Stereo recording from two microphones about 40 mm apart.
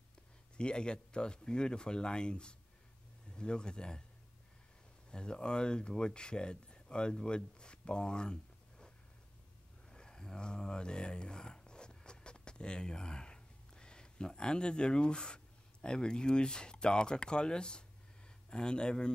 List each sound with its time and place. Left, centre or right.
0.6 s speech: left
5.1 s speech: left